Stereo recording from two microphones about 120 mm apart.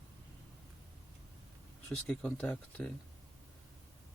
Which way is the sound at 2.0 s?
10° left (ahead or behind).